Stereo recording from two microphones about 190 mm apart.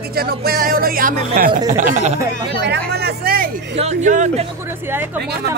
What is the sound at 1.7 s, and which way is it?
Speech, 40° right (ahead or behind).